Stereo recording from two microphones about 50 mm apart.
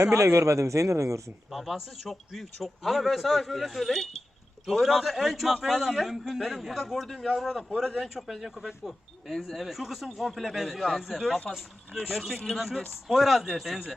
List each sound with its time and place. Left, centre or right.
0.0 s a man's voice: right
1.5 s a man's voice: centre
12.0 s a man's voice: centre